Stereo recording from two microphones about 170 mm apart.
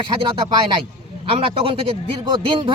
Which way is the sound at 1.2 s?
35° right (ahead or behind).